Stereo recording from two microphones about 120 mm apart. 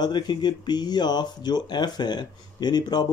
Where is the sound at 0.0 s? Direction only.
35° left (ahead or behind).